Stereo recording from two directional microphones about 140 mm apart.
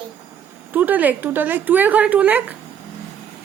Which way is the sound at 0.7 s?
10° right (ahead or behind).